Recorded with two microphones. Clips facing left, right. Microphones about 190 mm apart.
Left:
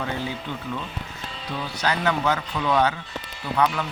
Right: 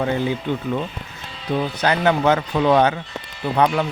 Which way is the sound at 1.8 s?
55° right (ahead or behind).